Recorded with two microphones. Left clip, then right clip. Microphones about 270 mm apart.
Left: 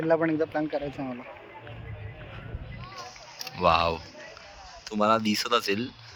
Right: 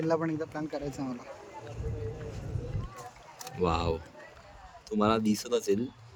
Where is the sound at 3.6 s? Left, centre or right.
Centre.